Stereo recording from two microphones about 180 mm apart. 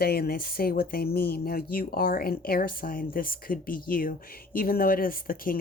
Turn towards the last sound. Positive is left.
turn(degrees=50)  # may be behind; listen again after turning